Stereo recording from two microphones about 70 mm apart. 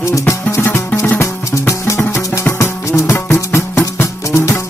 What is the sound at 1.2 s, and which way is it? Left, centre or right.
Music, left.